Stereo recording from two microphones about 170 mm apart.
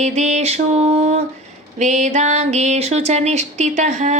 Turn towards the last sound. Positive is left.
turn(degrees=-45)  # may be behind; listen again after turning